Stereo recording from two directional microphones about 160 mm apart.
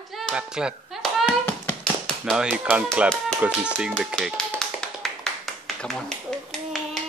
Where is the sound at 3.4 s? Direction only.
5° right (ahead or behind).